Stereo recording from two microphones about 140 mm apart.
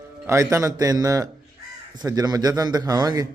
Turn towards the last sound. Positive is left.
turn(degrees=-25)  # may be behind; listen again after turning